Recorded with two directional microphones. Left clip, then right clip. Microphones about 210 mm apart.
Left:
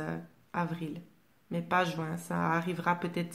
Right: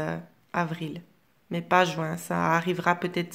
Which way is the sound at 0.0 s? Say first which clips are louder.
Right 7 dB; 30° right (ahead or behind).